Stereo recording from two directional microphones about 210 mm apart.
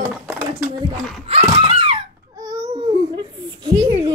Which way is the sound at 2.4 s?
15° right (ahead or behind).